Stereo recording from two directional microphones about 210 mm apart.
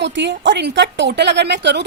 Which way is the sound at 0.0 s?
55° right (ahead or behind).